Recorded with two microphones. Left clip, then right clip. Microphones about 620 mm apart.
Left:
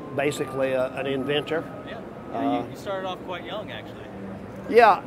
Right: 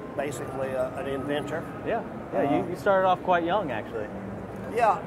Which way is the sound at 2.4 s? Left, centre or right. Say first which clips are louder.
Right 2 dB; right.